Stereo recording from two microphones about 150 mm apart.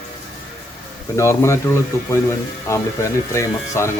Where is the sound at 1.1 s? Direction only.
20° left (ahead or behind).